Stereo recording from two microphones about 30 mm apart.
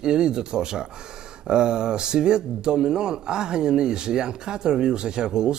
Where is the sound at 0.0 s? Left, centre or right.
Right.